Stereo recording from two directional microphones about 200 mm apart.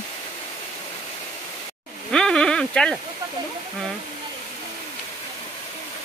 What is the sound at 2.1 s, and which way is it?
Speech, 5° left (ahead or behind).